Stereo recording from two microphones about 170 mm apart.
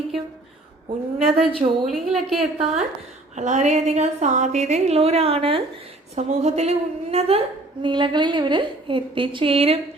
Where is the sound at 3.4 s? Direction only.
45° right (ahead or behind).